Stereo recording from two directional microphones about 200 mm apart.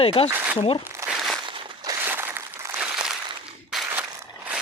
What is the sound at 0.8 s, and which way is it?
Crumpling, 15° right (ahead or behind).